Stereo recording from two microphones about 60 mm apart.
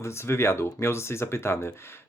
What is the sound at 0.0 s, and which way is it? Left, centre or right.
Speech, left.